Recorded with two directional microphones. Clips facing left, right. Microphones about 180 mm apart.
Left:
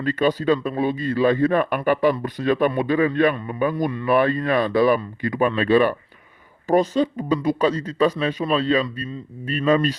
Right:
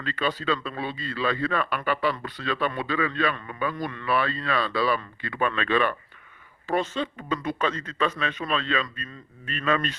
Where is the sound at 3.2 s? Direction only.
20° left (ahead or behind).